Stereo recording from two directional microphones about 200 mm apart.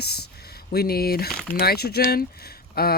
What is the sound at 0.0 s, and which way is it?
Speech, 55° left (ahead or behind).